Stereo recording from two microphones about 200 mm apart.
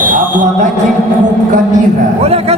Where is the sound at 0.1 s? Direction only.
40° right (ahead or behind).